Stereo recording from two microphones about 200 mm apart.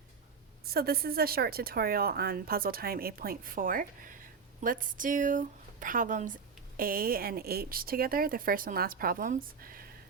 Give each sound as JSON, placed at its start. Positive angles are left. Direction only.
{"t": 0.6, "sound": "speech", "side_deg": -50}